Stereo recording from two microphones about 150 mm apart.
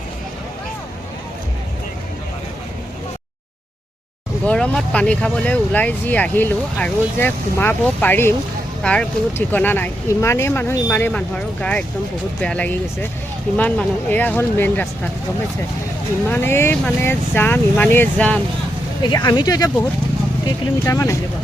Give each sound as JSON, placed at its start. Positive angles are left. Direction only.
{"t": 4.4, "sound": "speech", "side_deg": 5}
{"t": 16.3, "sound": "speech", "side_deg": 15}
{"t": 19.0, "sound": "speech", "side_deg": 30}
{"t": 20.8, "sound": "speech", "side_deg": 20}